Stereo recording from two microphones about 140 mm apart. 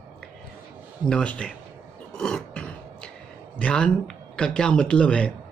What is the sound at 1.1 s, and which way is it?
Speech, 5° left (ahead or behind).